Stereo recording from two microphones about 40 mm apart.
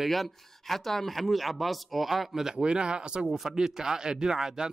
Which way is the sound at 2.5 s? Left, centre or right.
Right.